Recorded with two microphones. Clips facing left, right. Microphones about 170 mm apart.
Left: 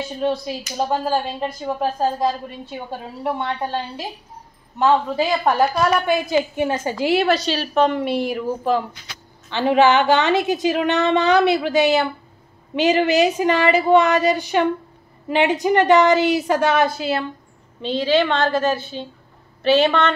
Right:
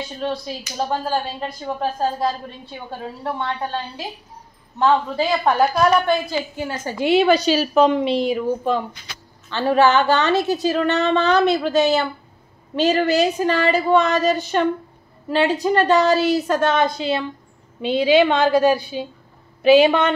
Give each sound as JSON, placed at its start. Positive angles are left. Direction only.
{"t": 0.2, "sound": "a woman's voice", "side_deg": 10}
{"t": 3.3, "sound": "a woman's voice", "side_deg": 20}
{"t": 7.2, "sound": "a woman's voice", "side_deg": 0}
{"t": 8.2, "sound": "a woman's voice", "side_deg": 70}
{"t": 9.5, "sound": "a woman's voice", "side_deg": 15}
{"t": 17.8, "sound": "a woman's voice", "side_deg": -10}